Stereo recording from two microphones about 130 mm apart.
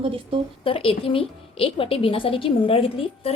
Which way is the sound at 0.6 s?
45° left (ahead or behind).